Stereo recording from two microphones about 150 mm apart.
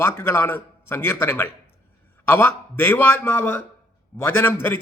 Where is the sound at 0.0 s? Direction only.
15° left (ahead or behind).